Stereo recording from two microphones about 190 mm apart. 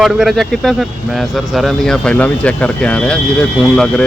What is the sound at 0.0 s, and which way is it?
Speech, centre (ahead or behind).